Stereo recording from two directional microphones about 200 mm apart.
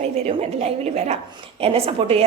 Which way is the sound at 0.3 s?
35° right (ahead or behind).